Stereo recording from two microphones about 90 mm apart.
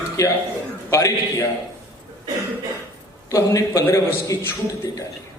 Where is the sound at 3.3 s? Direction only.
35° left (ahead or behind).